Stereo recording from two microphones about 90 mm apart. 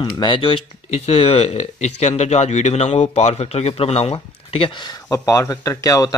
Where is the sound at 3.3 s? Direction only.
90° left.